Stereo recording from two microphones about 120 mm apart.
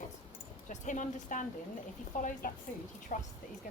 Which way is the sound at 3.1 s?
90° left.